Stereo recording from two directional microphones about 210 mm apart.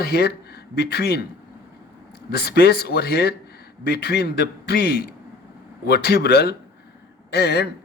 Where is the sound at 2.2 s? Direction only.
50° left (ahead or behind).